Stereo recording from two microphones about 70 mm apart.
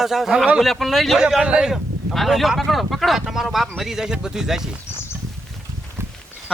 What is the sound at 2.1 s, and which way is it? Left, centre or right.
Speech, centre.